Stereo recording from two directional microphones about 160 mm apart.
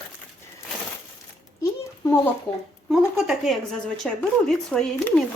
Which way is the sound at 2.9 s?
5° right (ahead or behind).